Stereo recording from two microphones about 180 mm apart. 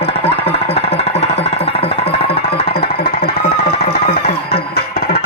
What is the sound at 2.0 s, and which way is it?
Music, 35° left (ahead or behind).